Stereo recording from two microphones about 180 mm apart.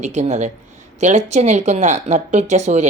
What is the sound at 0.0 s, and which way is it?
Speech, 40° right (ahead or behind).